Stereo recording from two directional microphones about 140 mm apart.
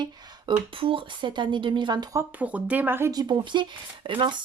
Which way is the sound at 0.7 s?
40° right (ahead or behind).